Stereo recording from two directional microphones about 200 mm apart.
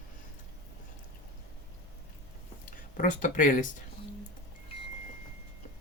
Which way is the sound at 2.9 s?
40° left (ahead or behind).